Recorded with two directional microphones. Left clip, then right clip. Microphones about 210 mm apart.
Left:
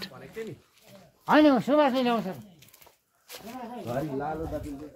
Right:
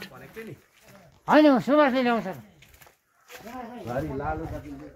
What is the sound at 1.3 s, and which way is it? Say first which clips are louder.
Speech: right 2 dB; 60° right (ahead or behind).